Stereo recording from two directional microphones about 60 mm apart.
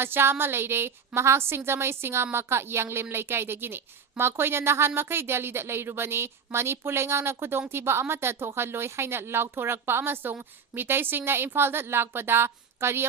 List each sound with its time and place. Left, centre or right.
0.0 s a woman's voice: right